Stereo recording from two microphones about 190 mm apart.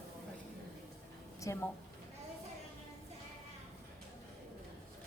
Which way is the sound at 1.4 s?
15° left (ahead or behind).